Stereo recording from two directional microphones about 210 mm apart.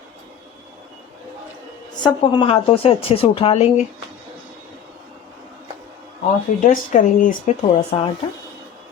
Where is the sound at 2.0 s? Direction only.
20° left (ahead or behind).